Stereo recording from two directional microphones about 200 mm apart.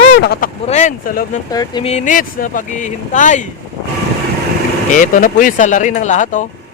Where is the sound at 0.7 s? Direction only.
35° left (ahead or behind).